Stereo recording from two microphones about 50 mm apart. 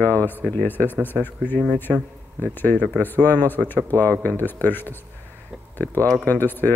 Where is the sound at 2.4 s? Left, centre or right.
Left.